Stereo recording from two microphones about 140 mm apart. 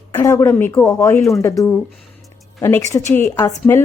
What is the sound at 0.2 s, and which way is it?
A woman's voice, 20° left (ahead or behind).